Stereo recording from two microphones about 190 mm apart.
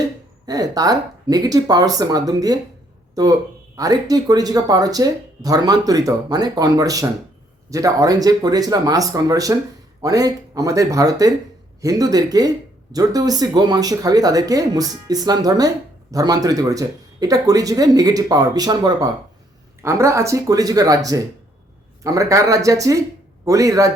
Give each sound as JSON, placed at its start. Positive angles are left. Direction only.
{"t": 0.4, "sound": "speech", "side_deg": -20}
{"t": 3.8, "sound": "speech", "side_deg": -20}